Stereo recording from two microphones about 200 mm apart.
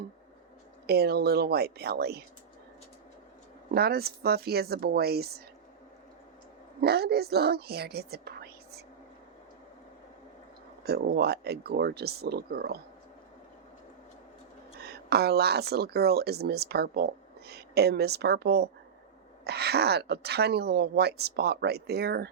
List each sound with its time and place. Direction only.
0.9 s speech: 55° right (ahead or behind)
3.8 s speech: 50° right (ahead or behind)
6.8 s speech: 50° right (ahead or behind)
10.8 s speech: 50° right (ahead or behind)
14.8 s a woman's voice: 55° right (ahead or behind)